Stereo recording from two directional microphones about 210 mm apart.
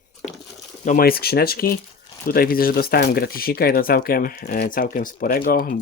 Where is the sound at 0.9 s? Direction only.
45° left (ahead or behind).